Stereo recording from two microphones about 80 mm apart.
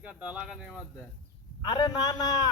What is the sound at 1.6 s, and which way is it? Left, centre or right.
Speech, left.